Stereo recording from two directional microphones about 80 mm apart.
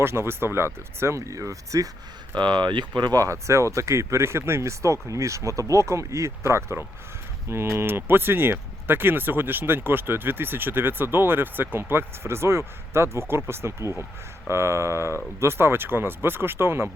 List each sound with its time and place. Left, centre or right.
0.0 s speech: right
2.3 s speech: right
3.2 s speech: right